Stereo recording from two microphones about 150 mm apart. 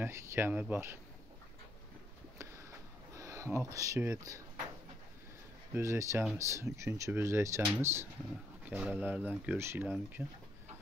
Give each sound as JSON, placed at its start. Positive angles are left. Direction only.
{"t": 0.0, "sound": "speech", "side_deg": -15}
{"t": 3.2, "sound": "speech", "side_deg": -20}
{"t": 5.7, "sound": "speech", "side_deg": -20}